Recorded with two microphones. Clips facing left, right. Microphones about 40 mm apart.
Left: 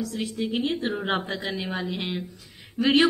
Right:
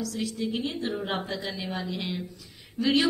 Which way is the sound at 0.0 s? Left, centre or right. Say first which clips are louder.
Left 2 dB; left.